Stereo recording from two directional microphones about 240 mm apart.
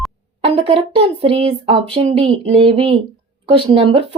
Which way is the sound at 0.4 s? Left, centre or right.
Right.